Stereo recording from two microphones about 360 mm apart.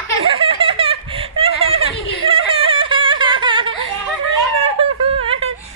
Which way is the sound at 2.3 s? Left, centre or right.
Centre.